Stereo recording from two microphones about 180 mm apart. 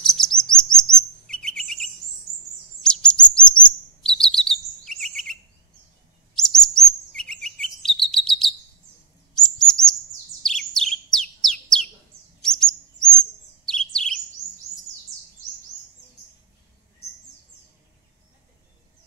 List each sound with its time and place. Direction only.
0.0 s chirp: 5° left (ahead or behind)
12.4 s bird: 5° left (ahead or behind)
13.7 s chirp: 5° left (ahead or behind)